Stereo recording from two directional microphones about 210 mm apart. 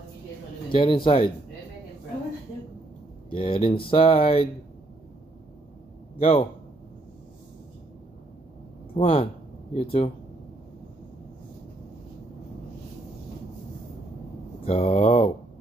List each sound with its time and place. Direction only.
0.7 s speech: 25° left (ahead or behind)
3.3 s speech: 25° left (ahead or behind)
6.1 s a man's voice: 30° left (ahead or behind)
8.9 s speech: 25° left (ahead or behind)
14.6 s mantra: 30° left (ahead or behind)